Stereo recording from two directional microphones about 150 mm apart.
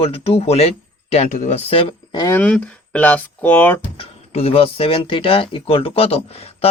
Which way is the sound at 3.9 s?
40° left (ahead or behind).